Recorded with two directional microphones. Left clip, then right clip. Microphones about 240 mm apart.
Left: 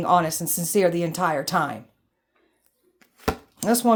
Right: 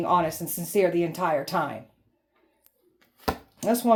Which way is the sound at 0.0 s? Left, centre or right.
Left.